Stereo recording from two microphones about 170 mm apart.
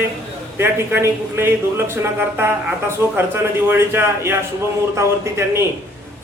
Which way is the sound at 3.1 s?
15° right (ahead or behind).